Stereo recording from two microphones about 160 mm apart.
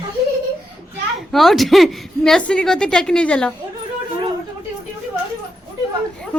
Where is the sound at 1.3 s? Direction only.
Centre (ahead or behind).